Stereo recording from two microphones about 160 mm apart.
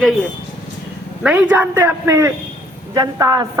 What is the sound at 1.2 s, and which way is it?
A man's voice, 10° right (ahead or behind).